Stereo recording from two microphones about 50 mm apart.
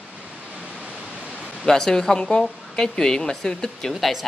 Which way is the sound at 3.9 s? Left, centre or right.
Centre.